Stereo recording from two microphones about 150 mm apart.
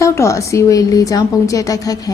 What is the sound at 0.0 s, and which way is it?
A woman's voice, 20° left (ahead or behind).